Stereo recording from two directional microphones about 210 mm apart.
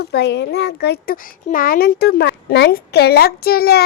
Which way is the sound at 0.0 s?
50° left (ahead or behind).